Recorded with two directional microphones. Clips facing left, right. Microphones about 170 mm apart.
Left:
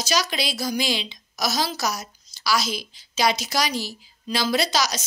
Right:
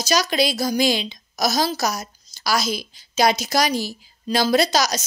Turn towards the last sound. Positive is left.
turn(degrees=-45)  # may be behind; listen again after turning